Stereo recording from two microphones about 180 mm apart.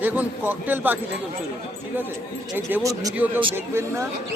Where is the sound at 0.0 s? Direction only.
10° right (ahead or behind).